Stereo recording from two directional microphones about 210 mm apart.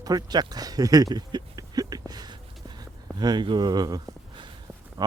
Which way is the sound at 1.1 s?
20° right (ahead or behind).